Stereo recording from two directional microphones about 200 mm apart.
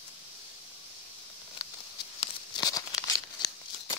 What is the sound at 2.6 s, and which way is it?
Crumpling, 20° left (ahead or behind).